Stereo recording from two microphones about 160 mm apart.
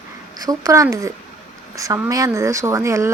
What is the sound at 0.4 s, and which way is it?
Speech, 20° right (ahead or behind).